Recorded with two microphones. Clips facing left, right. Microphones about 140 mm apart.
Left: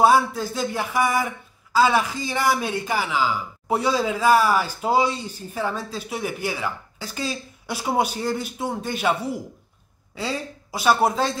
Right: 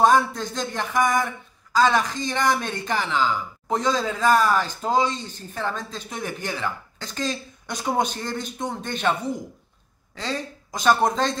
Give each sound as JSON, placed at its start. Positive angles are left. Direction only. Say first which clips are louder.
{"t": 0.0, "sound": "speech", "louder": "left 1 dB", "side_deg": 5}